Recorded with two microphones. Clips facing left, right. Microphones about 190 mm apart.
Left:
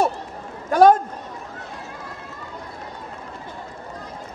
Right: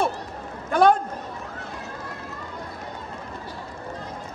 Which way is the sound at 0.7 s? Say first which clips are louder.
Left 4 dB; 45° left (ahead or behind).